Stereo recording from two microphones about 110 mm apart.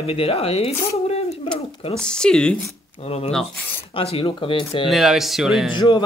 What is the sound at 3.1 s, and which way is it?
Speech, 65° left (ahead or behind).